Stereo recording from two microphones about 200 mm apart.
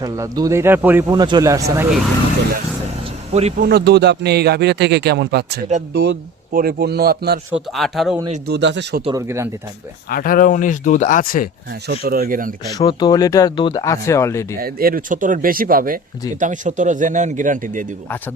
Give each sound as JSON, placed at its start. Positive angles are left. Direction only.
{"t": 0.0, "sound": "speech", "side_deg": -15}
{"t": 3.6, "sound": "a man's voice", "side_deg": -50}
{"t": 7.5, "sound": "a man's voice", "side_deg": 0}
{"t": 8.4, "sound": "speech", "side_deg": -60}
{"t": 9.0, "sound": "speech", "side_deg": -15}
{"t": 10.1, "sound": "speech", "side_deg": 45}
{"t": 11.7, "sound": "a man's voice", "side_deg": -50}
{"t": 12.7, "sound": "speech", "side_deg": 20}
{"t": 14.6, "sound": "a man's voice", "side_deg": -50}